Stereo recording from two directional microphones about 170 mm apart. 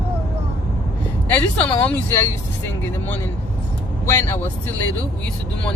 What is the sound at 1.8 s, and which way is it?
Speech, 15° left (ahead or behind).